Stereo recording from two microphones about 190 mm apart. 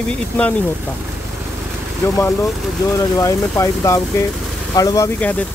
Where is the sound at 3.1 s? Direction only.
15° left (ahead or behind).